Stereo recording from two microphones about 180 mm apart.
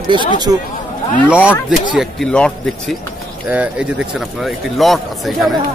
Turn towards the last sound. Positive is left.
turn(degrees=0)  # may be behind; listen again after turning